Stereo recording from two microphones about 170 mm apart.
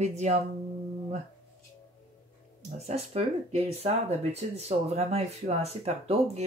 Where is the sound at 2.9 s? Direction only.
35° right (ahead or behind).